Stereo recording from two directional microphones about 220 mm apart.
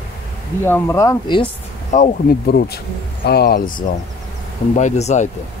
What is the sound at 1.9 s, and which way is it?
Speech, 40° left (ahead or behind).